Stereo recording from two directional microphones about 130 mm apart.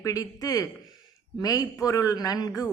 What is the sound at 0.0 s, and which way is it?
Speech, 25° left (ahead or behind).